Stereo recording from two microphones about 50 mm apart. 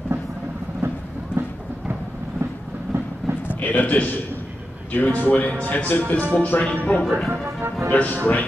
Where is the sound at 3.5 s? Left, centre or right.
Left.